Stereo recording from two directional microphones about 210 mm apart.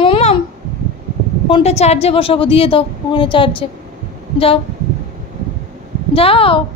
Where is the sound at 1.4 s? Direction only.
30° left (ahead or behind).